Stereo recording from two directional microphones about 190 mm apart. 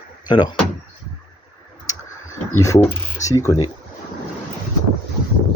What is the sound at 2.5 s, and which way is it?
Speech, 15° left (ahead or behind).